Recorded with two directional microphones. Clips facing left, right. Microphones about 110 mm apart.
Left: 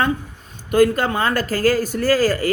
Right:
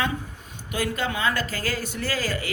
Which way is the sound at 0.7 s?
50° left (ahead or behind).